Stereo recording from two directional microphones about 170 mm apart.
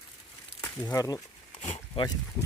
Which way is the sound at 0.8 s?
20° left (ahead or behind).